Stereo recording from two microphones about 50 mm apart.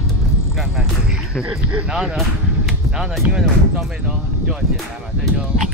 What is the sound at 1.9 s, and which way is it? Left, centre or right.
Speech, centre.